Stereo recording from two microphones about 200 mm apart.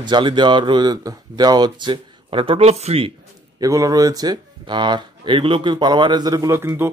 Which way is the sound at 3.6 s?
15° right (ahead or behind).